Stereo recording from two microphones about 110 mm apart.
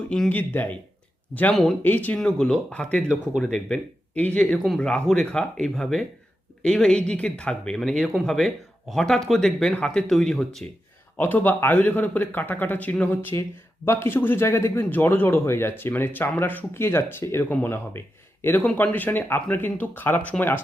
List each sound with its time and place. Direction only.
0.1 s speech: 10° left (ahead or behind)
4.5 s speech: centre (ahead or behind)
11.2 s a man's voice: 15° left (ahead or behind)